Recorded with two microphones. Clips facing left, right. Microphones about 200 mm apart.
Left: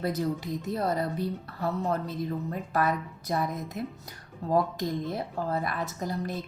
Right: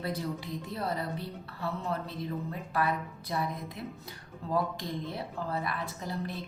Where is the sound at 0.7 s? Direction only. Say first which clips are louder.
Left 6 dB; 45° left (ahead or behind).